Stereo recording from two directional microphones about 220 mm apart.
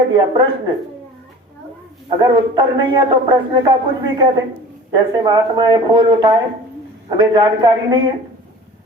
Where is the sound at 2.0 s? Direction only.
20° right (ahead or behind).